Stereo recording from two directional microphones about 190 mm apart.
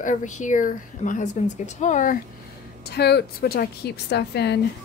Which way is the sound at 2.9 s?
60° left (ahead or behind).